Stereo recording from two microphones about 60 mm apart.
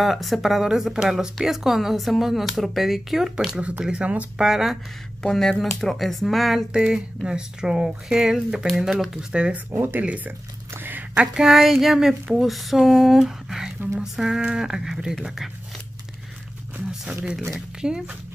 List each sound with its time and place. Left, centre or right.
0.0 s speech: centre
3.8 s speech: centre
4.4 s speech: centre
5.2 s speech: centre
6.7 s speech: centre
9.3 s speech: centre
9.7 s speech: right
9.9 s speech: right
11.1 s speech: centre
17.1 s speech: right